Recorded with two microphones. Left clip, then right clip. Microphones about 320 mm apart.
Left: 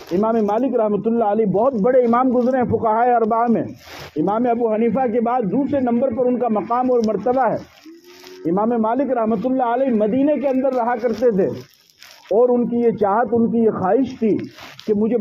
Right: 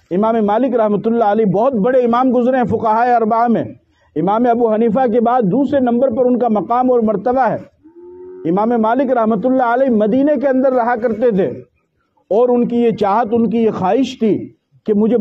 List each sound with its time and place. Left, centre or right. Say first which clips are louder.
0.1 s a man's voice: right 4 dB; right